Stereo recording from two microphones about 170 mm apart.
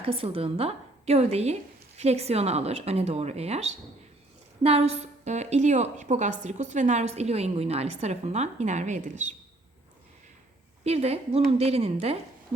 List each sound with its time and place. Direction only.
0.0 s a woman's voice: 35° right (ahead or behind)
10.8 s a woman's voice: 40° right (ahead or behind)